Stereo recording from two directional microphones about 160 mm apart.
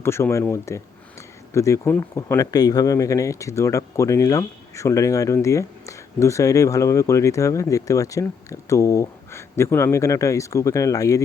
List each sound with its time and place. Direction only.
0.0 s speech: 15° left (ahead or behind)